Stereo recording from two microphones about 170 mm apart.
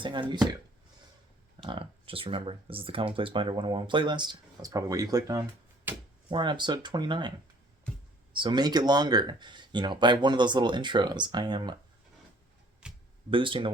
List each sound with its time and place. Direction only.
0.0 s speech: 30° right (ahead or behind)
1.6 s speech: 30° right (ahead or behind)
12.8 s a sound: 5° right (ahead or behind)
13.3 s speech: 30° right (ahead or behind)